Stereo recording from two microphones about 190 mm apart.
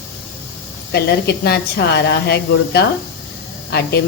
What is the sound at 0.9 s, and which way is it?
Speech, 55° left (ahead or behind).